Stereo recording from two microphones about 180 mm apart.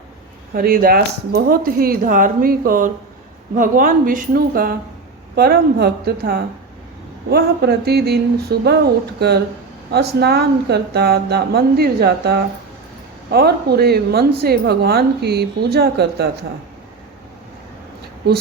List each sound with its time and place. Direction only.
0.5 s a woman's voice: 55° right (ahead or behind)